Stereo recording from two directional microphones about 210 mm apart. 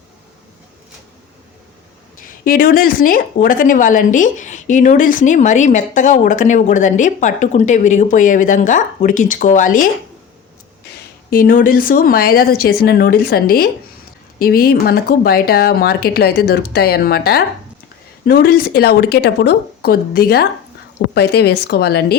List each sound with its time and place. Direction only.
2.2 s a woman's voice: 40° left (ahead or behind)
11.3 s speech: 45° left (ahead or behind)